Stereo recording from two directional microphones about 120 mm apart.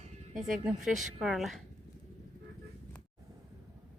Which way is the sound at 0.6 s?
5° right (ahead or behind).